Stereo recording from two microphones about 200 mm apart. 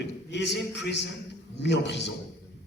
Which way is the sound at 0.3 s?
60° left (ahead or behind).